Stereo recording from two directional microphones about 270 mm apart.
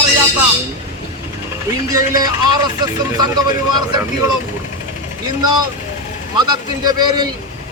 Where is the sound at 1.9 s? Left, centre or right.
Centre.